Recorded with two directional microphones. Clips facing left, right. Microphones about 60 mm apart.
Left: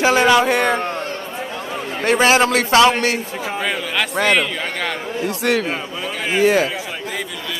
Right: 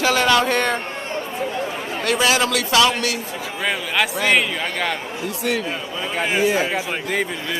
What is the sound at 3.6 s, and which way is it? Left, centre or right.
Speech, centre.